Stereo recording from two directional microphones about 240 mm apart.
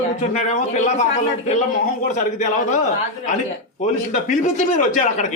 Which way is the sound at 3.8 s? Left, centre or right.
Left.